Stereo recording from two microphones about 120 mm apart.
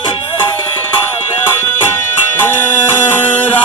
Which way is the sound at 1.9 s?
20° left (ahead or behind).